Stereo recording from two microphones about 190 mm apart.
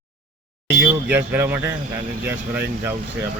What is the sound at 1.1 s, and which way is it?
Speech, 10° right (ahead or behind).